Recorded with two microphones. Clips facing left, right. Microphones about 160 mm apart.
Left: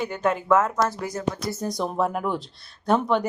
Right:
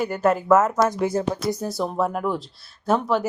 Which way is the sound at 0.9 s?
25° right (ahead or behind).